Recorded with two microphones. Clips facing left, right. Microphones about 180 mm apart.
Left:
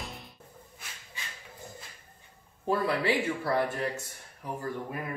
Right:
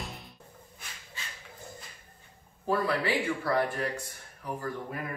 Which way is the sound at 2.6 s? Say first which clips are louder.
Left 1 dB; 25° left (ahead or behind).